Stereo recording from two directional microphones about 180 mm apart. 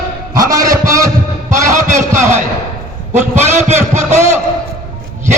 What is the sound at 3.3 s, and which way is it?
Speech, 15° right (ahead or behind).